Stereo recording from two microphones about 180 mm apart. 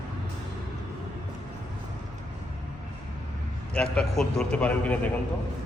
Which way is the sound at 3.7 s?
5° left (ahead or behind).